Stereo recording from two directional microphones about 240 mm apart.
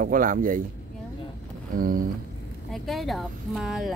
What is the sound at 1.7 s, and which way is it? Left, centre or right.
Speech, right.